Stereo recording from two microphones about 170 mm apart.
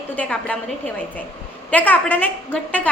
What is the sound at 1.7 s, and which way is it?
Speech, 10° left (ahead or behind).